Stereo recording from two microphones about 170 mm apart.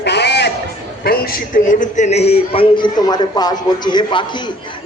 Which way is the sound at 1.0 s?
60° left (ahead or behind).